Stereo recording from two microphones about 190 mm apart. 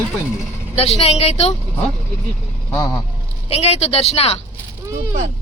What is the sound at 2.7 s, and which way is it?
Speech, 15° left (ahead or behind).